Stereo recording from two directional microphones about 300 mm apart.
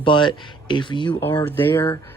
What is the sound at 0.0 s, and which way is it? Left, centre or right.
Speech, centre.